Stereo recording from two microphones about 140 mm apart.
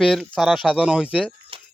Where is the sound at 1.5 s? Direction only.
40° right (ahead or behind).